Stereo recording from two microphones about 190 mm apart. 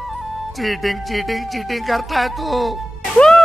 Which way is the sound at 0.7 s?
Centre (ahead or behind).